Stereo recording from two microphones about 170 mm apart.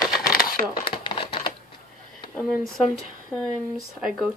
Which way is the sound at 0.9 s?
30° left (ahead or behind).